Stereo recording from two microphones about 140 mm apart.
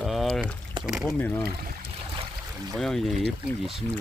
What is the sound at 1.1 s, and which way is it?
Speech, 10° left (ahead or behind).